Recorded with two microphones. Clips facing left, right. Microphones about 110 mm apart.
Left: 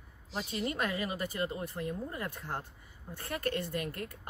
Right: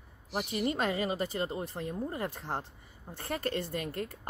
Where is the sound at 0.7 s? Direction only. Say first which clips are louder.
Right 4 dB; 30° right (ahead or behind).